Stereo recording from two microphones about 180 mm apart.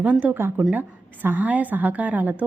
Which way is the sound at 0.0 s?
10° right (ahead or behind).